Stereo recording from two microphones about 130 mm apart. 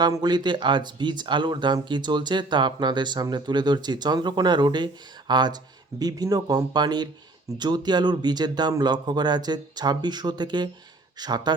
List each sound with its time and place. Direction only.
0.0 s speech: 35° right (ahead or behind)